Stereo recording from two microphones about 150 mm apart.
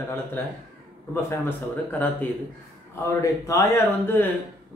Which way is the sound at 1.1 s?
15° left (ahead or behind).